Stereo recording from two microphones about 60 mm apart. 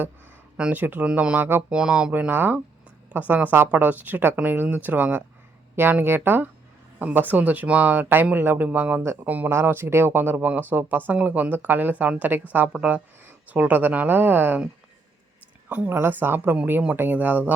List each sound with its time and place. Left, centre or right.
0.5 s speech: centre
0.8 s speech: right
1.7 s speech: centre
2.1 s speech: right
9.5 s speech: right
12.6 s speech: centre
13.2 s speech: right
15.9 s speech: right